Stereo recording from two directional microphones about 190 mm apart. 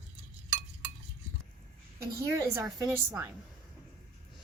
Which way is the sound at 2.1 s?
15° right (ahead or behind).